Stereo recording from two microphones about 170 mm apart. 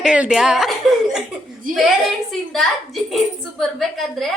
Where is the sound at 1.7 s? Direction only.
55° right (ahead or behind).